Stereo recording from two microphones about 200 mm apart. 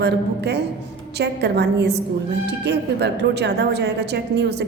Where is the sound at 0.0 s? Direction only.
55° right (ahead or behind).